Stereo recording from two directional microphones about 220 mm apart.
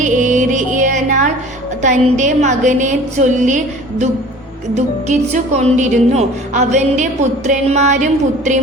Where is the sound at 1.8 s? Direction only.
35° right (ahead or behind).